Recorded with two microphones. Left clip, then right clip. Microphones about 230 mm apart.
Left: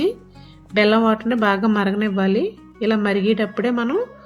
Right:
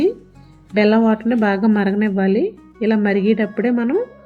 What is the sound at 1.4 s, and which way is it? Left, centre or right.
Speech, left.